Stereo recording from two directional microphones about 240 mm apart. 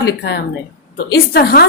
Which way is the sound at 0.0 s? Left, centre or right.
Left.